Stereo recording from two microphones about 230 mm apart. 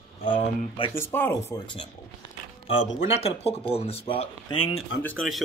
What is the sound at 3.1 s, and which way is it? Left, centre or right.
Speech, left.